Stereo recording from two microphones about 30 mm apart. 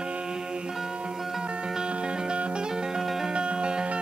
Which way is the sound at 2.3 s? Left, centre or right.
Right.